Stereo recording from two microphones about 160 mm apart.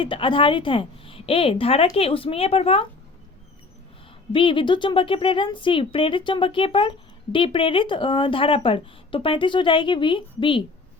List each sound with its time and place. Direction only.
0.0 s a woman's voice: 30° left (ahead or behind)
4.3 s a woman's voice: 35° left (ahead or behind)